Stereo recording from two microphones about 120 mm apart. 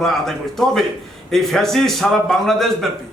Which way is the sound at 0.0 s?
Centre (ahead or behind).